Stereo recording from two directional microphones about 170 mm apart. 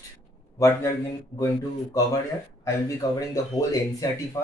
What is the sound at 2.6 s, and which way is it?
Speech, 20° left (ahead or behind).